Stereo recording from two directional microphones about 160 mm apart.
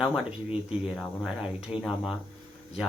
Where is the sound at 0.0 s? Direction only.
5° right (ahead or behind).